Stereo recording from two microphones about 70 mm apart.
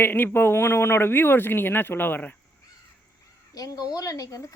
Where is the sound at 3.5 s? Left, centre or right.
Left.